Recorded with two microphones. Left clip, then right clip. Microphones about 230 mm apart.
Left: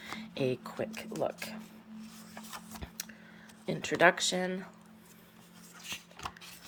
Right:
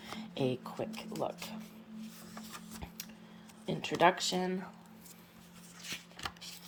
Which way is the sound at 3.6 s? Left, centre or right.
Centre.